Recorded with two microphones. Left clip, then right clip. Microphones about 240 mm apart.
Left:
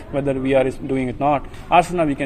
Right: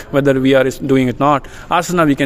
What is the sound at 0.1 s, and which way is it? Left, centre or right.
A man's voice, right.